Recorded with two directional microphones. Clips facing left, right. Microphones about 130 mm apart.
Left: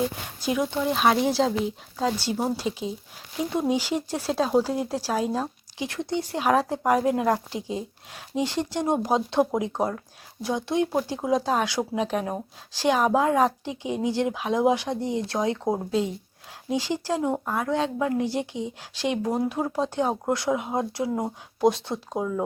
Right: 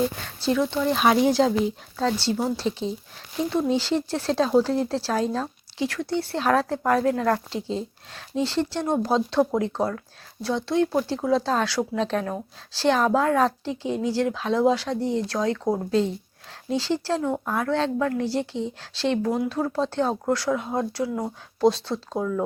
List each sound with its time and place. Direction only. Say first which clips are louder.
0.3 s speech: right 3 dB; 15° left (ahead or behind)
0.9 s speech: right 2 dB; centre (ahead or behind); by 15.8 s 20° left (ahead or behind)
15.9 s speech: right 3 dB; 10° left (ahead or behind)